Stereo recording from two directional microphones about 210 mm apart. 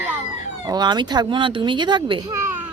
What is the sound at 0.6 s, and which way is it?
A woman's voice, 20° right (ahead or behind).